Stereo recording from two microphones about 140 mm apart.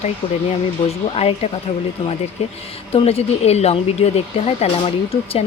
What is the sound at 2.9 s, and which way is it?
Speech, 45° left (ahead or behind).